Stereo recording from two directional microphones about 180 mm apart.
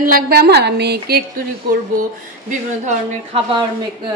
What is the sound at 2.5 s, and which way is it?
Speech, 40° right (ahead or behind).